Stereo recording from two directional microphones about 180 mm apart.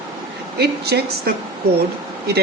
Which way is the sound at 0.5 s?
65° right (ahead or behind).